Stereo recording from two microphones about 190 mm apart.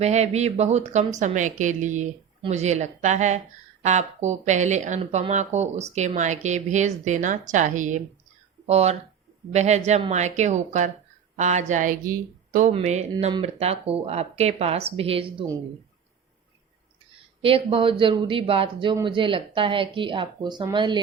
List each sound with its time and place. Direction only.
0.0 s speech: 35° right (ahead or behind)
17.4 s speech: 30° right (ahead or behind)